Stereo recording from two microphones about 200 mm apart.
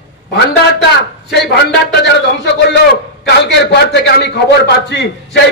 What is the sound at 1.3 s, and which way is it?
A man's voice, 55° left (ahead or behind).